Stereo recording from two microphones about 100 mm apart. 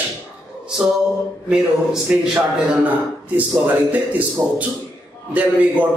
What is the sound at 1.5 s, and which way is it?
A man's voice, 15° right (ahead or behind).